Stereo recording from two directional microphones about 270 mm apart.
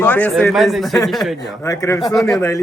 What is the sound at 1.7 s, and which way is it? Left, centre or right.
Speech, centre.